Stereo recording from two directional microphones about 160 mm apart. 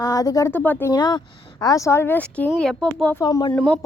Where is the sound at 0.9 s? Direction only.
25° left (ahead or behind); by 3.2 s 10° left (ahead or behind).